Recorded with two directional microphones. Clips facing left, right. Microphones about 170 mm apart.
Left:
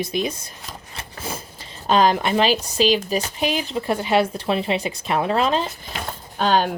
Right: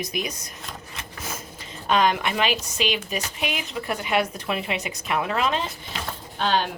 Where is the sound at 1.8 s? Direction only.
30° left (ahead or behind).